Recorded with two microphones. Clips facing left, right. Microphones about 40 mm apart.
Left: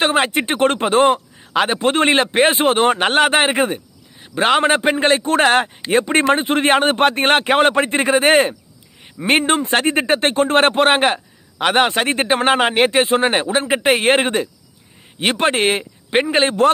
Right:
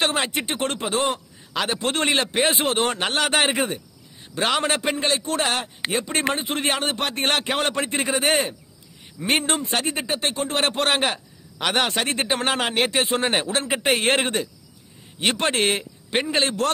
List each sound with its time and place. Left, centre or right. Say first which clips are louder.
0.0 s speech: left 7 dB; left
10.8 s a man's voice: left 7 dB; left